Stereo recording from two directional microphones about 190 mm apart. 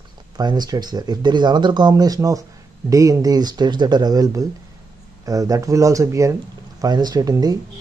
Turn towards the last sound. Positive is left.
turn(degrees=-20)  # may be behind; listen again after turning